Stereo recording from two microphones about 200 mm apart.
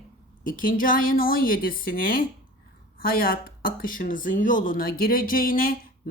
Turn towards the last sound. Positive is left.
turn(degrees=45)  # may be behind; listen again after turning